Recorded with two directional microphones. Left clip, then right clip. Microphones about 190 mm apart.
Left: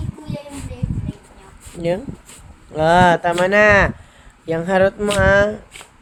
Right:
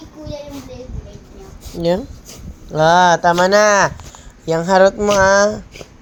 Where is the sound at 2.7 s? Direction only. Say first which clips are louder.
Right 2 dB; 10° left (ahead or behind).